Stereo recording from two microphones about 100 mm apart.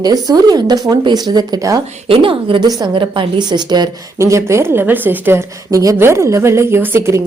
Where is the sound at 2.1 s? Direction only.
60° right (ahead or behind).